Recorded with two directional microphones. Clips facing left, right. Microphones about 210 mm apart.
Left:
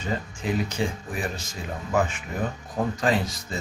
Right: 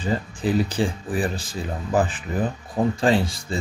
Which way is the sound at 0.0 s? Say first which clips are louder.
Right 5 dB; 35° right (ahead or behind).